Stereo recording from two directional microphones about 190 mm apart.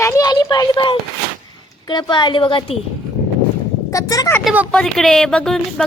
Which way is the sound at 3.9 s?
15° left (ahead or behind).